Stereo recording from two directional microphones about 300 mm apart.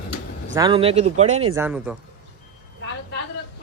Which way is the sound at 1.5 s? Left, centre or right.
Centre.